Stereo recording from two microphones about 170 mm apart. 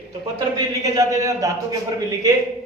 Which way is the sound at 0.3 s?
20° right (ahead or behind).